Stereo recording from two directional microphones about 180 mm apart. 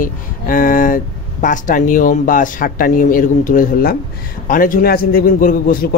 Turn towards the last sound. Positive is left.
turn(degrees=50)  # may be behind; listen again after turning